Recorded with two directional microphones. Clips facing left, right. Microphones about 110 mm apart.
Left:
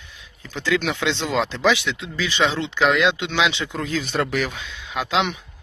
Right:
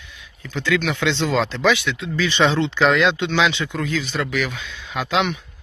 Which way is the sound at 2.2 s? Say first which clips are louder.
Right 4 dB; 5° left (ahead or behind).